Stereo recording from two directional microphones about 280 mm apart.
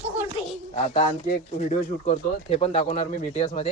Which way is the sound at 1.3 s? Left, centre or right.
Left.